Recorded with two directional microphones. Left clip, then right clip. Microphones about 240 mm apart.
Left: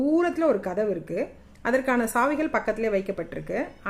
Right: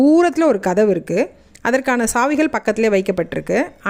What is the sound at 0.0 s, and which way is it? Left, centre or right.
Speech, right.